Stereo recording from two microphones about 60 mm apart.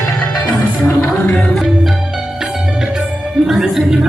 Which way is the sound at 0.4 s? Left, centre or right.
Left.